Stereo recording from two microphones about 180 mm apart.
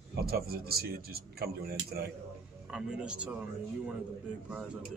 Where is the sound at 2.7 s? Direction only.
5° right (ahead or behind).